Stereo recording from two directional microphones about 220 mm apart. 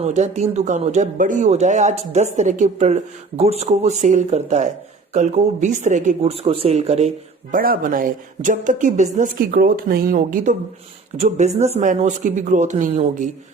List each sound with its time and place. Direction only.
0.0 s speech: 30° right (ahead or behind)
7.5 s speech: 40° right (ahead or behind)